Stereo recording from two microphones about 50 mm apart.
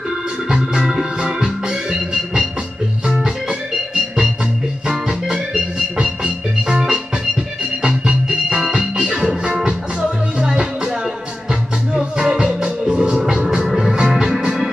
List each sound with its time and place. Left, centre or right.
0.5 s music: centre
10.4 s music: centre
11.9 s music: centre